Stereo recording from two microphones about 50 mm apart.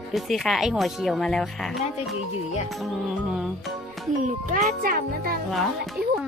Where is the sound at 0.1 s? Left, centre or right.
Centre.